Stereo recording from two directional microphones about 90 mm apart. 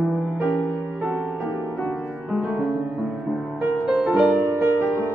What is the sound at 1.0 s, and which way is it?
Music, 10° right (ahead or behind).